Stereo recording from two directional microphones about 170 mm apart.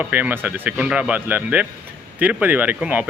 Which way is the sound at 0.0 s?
10° right (ahead or behind).